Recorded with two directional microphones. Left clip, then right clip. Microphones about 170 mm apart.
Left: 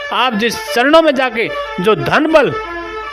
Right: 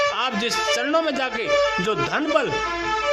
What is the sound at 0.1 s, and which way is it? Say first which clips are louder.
A man's voice: left 8 dB; 45° left (ahead or behind).